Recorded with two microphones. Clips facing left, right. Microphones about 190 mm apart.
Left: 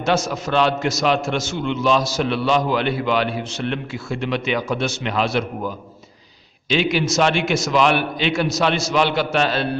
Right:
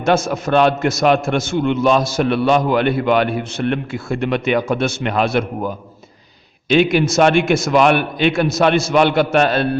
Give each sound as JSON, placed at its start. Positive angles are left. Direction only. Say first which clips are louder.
{"t": 0.0, "sound": "a man's voice", "louder": "right 4 dB", "side_deg": -55}